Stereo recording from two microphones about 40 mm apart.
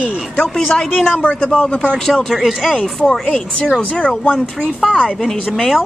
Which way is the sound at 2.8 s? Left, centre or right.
Left.